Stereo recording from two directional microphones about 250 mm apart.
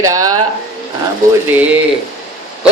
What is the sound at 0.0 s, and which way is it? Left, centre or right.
Speech, centre.